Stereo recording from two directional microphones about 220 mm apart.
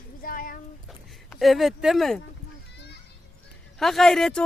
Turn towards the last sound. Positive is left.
turn(degrees=0)  # may be behind; listen again after turning